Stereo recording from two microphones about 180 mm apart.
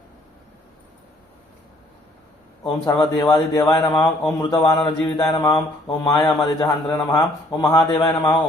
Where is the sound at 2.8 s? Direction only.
20° left (ahead or behind).